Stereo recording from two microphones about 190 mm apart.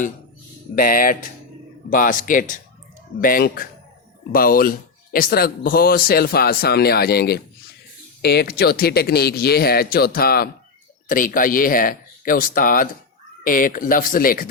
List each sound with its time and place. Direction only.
0.8 s a man's voice: 45° left (ahead or behind)